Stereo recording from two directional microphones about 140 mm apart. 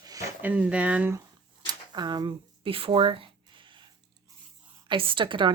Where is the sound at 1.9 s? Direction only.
30° right (ahead or behind).